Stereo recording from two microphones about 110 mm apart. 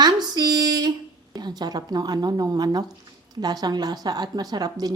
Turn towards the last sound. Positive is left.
turn(degrees=-35)  # may be behind; listen again after turning